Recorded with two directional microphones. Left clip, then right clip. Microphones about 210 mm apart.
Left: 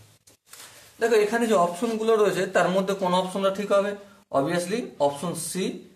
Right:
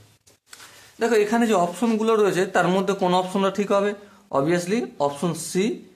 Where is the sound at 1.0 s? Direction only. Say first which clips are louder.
Right 1 dB; 40° right (ahead or behind).